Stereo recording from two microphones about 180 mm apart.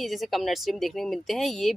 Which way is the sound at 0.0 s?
Centre (ahead or behind).